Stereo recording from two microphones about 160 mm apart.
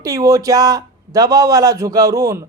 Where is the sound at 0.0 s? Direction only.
20° right (ahead or behind).